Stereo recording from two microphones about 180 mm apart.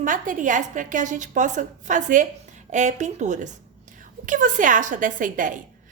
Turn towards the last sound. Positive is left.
turn(degrees=-45)  # may be behind; listen again after turning